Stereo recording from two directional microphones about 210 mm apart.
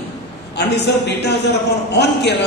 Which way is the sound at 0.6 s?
55° left (ahead or behind).